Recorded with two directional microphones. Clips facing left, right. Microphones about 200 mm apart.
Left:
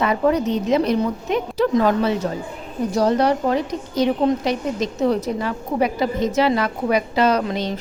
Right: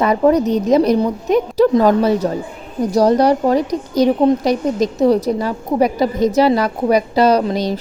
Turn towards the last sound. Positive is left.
turn(degrees=-35)  # may be behind; listen again after turning